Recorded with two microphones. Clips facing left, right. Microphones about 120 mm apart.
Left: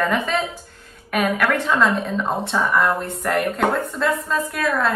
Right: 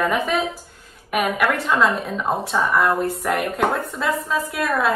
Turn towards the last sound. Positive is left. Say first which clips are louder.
# even
turn(degrees=0)  # may be behind; listen again after turning